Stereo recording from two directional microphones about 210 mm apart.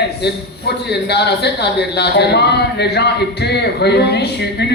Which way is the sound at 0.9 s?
50° left (ahead or behind).